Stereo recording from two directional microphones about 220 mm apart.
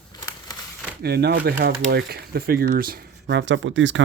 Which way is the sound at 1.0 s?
45° right (ahead or behind).